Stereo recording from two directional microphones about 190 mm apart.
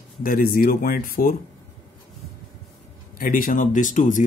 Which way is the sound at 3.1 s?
45° left (ahead or behind).